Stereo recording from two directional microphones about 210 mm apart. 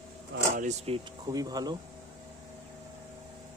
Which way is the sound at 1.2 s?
15° right (ahead or behind).